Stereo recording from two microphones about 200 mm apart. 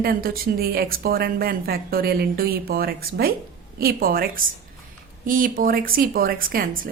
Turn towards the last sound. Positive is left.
turn(degrees=-45)  # may be behind; listen again after turning